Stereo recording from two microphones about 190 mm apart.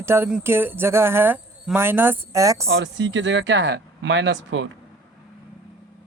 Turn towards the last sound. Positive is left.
turn(degrees=-70)  # may be behind; listen again after turning